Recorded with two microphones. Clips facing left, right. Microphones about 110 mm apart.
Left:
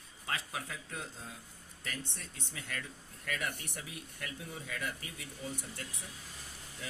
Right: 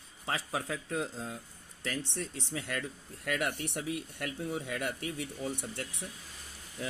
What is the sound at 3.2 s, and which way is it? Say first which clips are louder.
Speech: right 6 dB; 55° right (ahead or behind).